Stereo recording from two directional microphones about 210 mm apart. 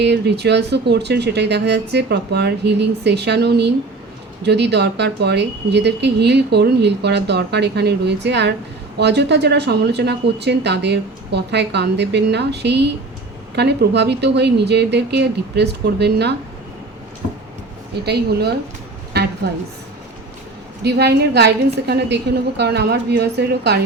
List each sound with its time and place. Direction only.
0.0 s speech: 55° right (ahead or behind)
18.0 s speech: 50° right (ahead or behind)
20.8 s speech: 50° right (ahead or behind)